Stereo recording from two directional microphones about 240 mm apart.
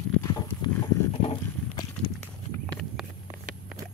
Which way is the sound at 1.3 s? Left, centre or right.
Centre.